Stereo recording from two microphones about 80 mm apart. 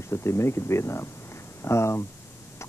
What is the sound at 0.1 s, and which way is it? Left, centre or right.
Speech, left.